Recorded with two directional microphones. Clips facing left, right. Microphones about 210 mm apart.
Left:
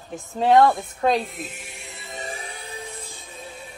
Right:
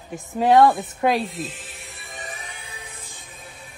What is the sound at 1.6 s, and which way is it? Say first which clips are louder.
Music: left 2 dB; 15° left (ahead or behind).